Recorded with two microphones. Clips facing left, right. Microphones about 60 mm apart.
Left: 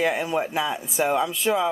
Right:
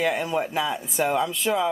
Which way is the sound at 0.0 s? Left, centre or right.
Centre.